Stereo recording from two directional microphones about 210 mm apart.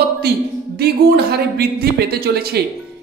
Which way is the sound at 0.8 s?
50° right (ahead or behind).